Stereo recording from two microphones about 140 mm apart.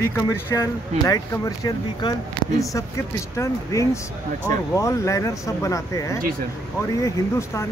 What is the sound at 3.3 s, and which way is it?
Speech, 20° left (ahead or behind).